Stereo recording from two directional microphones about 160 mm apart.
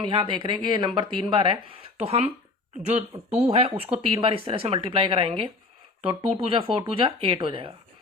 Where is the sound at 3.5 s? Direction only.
40° right (ahead or behind).